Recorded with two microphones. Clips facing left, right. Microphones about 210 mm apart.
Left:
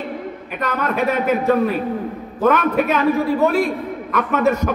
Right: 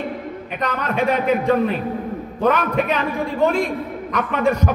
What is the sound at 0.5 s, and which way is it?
A man's voice, 50° left (ahead or behind).